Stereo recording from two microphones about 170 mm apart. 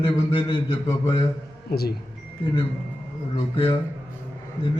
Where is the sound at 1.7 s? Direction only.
65° left (ahead or behind).